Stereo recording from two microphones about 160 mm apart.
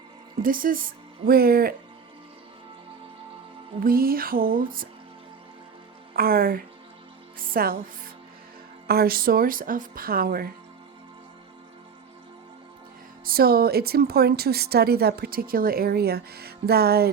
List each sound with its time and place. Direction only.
0.4 s speech: 60° right (ahead or behind)
3.8 s speech: 65° right (ahead or behind)
6.1 s a woman's voice: 70° right (ahead or behind)
13.2 s a woman's voice: 70° right (ahead or behind)